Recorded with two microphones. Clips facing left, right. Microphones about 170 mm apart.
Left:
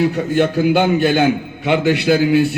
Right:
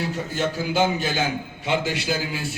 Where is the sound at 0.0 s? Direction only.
60° left (ahead or behind).